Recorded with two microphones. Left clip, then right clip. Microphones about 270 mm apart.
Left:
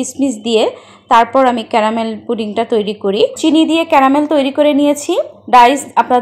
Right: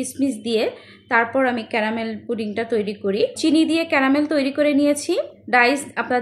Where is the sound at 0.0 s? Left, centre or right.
Centre.